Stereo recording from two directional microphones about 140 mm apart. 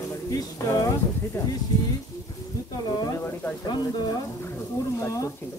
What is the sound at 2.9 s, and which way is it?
Speech, 25° left (ahead or behind).